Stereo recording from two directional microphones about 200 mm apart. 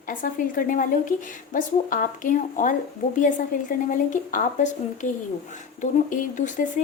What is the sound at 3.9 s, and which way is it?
Speech, 40° left (ahead or behind).